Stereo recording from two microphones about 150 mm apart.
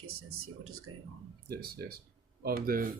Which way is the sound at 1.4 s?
90° right.